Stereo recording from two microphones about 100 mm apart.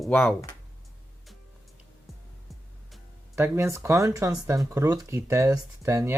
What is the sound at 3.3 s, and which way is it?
Speech, 20° right (ahead or behind).